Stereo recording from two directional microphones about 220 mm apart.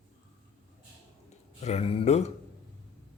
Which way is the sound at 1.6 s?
30° left (ahead or behind).